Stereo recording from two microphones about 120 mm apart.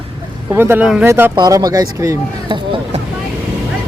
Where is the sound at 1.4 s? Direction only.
30° right (ahead or behind).